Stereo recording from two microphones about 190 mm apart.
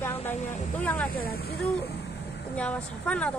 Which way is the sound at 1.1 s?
50° left (ahead or behind).